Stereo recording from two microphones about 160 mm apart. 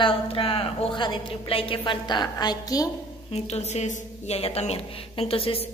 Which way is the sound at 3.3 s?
40° left (ahead or behind).